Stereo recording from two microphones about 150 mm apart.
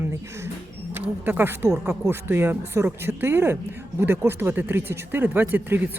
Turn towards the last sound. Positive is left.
turn(degrees=-15)  # may be behind; listen again after turning